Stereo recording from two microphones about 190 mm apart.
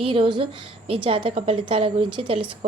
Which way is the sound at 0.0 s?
30° right (ahead or behind).